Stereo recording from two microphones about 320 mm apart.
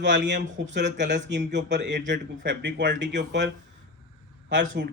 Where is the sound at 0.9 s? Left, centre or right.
Right.